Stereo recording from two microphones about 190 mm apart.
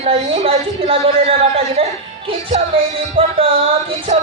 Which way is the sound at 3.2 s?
30° right (ahead or behind).